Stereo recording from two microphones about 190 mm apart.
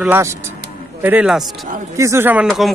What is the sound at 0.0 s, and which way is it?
Speech, 10° right (ahead or behind).